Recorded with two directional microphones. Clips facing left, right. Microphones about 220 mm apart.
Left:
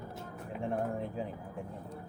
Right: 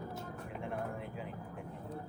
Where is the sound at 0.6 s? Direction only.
35° left (ahead or behind).